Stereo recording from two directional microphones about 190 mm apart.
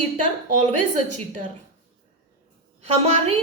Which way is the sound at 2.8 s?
35° right (ahead or behind).